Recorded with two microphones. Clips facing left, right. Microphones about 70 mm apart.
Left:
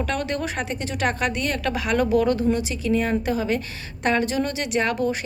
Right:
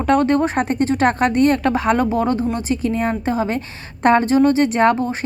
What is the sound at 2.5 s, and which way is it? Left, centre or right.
A woman's voice, right.